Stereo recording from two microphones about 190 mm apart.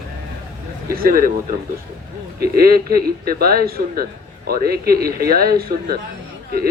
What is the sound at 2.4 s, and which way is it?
Speech, 55° right (ahead or behind).